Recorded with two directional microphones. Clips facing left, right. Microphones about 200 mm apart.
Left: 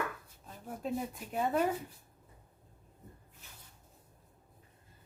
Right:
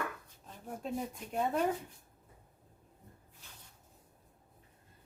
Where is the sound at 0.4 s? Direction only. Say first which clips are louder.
Left 2 dB; 5° left (ahead or behind).